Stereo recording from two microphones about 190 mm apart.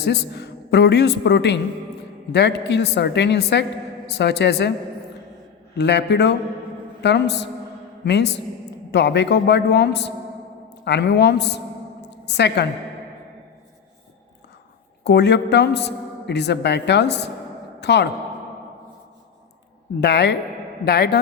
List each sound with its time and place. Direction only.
0.0 s a woman's voice: 60° left (ahead or behind)
5.7 s a woman's voice: 65° left (ahead or behind)
15.0 s a woman's voice: 65° left (ahead or behind)
20.0 s a woman's voice: 65° left (ahead or behind)